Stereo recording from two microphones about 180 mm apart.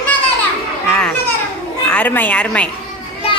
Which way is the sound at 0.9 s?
5° left (ahead or behind).